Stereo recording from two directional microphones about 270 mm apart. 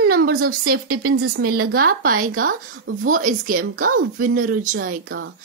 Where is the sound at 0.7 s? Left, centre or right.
Right.